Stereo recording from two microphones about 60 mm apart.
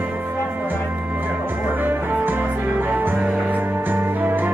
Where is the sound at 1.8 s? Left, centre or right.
Right.